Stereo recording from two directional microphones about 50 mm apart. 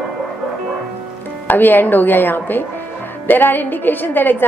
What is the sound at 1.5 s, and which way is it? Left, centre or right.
A woman's voice, left.